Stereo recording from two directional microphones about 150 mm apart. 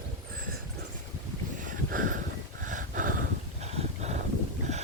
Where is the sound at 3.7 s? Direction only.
45° right (ahead or behind).